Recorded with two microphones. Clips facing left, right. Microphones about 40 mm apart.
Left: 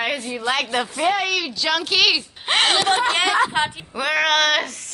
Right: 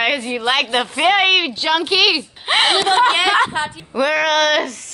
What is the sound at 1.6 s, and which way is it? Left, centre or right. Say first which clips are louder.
Speech: right 3 dB; centre.